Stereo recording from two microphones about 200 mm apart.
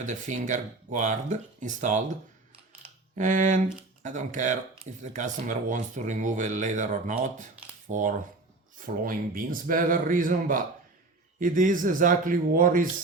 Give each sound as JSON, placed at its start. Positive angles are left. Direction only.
{"t": 0.0, "sound": "speech", "side_deg": -40}
{"t": 3.2, "sound": "a man's voice", "side_deg": -40}